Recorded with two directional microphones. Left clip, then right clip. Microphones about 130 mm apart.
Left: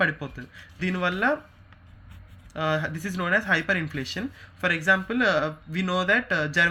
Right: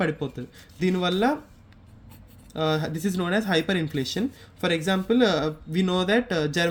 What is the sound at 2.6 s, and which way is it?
Speech, 30° right (ahead or behind).